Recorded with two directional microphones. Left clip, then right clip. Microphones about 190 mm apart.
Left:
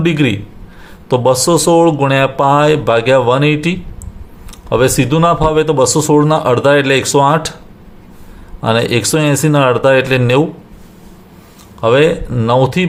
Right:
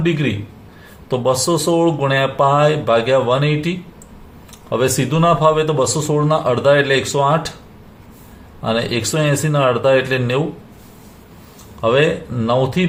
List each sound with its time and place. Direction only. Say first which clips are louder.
0.0 s speech: left 5 dB; 45° left (ahead or behind)
8.6 s speech: left 6 dB; 40° left (ahead or behind)
11.8 s speech: left 5 dB; 35° left (ahead or behind)